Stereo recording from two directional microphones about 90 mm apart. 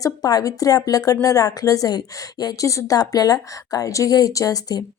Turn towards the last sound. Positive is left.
turn(degrees=45)  # may be behind; listen again after turning